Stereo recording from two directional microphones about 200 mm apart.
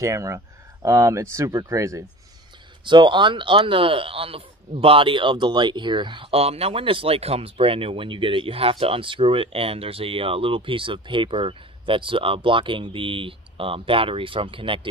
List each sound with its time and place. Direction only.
0.0 s speech: 15° right (ahead or behind)